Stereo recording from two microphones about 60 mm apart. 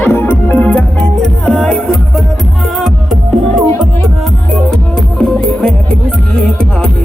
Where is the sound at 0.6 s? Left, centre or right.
Left.